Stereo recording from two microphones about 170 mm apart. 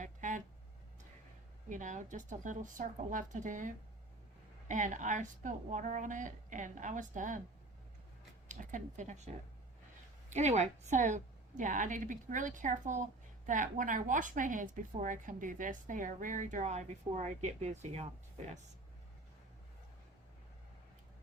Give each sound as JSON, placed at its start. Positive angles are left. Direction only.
{"t": 0.0, "sound": "a sound", "side_deg": -45}
{"t": 1.7, "sound": "a woman's voice", "side_deg": -45}
{"t": 4.7, "sound": "a woman's voice", "side_deg": -45}
{"t": 8.4, "sound": "a woman's voice", "side_deg": -45}